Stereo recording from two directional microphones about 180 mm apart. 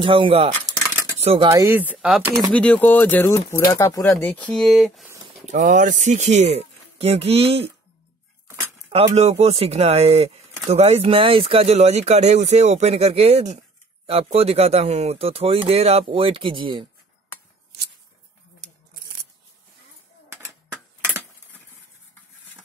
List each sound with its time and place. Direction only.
0.0 s speech: 30° right (ahead or behind)
1.5 s speech: 15° right (ahead or behind)
2.5 s speech: 5° left (ahead or behind)
5.4 s speech: 40° right (ahead or behind)
8.9 s speech: 35° right (ahead or behind)